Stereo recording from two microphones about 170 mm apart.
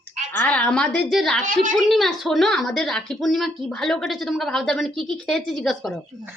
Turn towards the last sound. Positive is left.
turn(degrees=5)  # may be behind; listen again after turning